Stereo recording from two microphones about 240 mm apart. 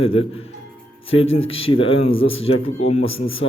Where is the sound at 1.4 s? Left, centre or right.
Left.